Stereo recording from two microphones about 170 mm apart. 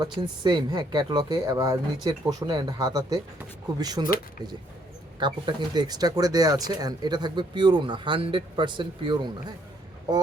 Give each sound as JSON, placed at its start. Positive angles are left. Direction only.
{"t": 0.0, "sound": "speech", "side_deg": -25}
{"t": 5.2, "sound": "speech", "side_deg": -25}